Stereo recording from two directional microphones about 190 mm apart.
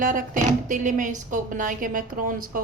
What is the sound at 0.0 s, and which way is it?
A woman's voice, 45° right (ahead or behind).